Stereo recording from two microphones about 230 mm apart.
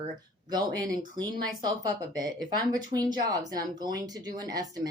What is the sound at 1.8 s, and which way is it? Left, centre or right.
Speech, centre.